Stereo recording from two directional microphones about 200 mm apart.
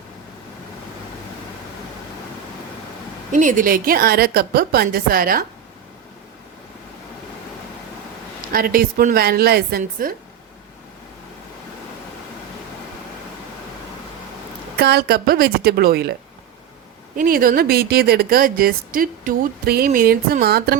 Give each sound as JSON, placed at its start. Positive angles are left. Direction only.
{"t": 3.3, "sound": "a woman's voice", "side_deg": -40}
{"t": 8.5, "sound": "a woman's voice", "side_deg": -45}
{"t": 14.8, "sound": "a woman's voice", "side_deg": -55}
{"t": 17.2, "sound": "a woman's voice", "side_deg": -45}